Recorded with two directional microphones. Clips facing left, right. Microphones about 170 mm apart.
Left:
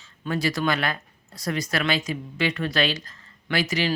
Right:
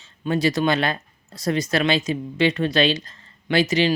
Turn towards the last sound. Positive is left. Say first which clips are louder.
# right 6 dB
turn(degrees=-20)  # may be behind; listen again after turning